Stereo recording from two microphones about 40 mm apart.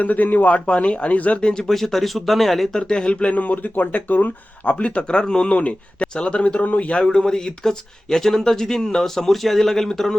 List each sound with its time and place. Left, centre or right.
0.0 s speech: left
0.6 s speech: left
1.4 s speech: left
1.6 s speech: centre
2.7 s speech: centre
3.3 s speech: left
4.6 s speech: left
5.5 s speech: left; by 10.2 s centre